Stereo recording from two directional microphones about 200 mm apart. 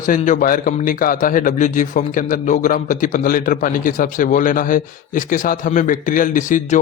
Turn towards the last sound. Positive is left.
turn(degrees=40)  # may be behind; listen again after turning